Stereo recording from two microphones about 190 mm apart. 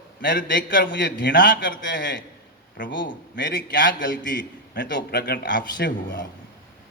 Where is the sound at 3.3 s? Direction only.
50° left (ahead or behind).